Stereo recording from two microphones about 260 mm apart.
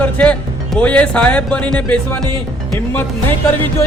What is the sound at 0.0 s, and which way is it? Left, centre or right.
Speech, centre.